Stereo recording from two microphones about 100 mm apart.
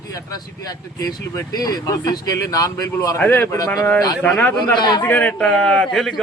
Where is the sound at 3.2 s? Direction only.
20° left (ahead or behind).